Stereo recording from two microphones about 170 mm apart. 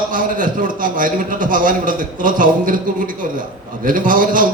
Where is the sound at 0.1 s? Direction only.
50° right (ahead or behind).